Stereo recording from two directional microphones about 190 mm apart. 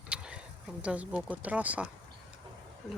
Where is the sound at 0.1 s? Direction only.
5° right (ahead or behind).